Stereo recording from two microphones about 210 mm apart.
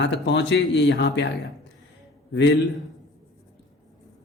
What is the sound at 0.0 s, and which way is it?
A man's voice, 60° left (ahead or behind).